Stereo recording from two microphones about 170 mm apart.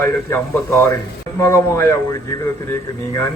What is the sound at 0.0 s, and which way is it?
A man's voice, 15° left (ahead or behind).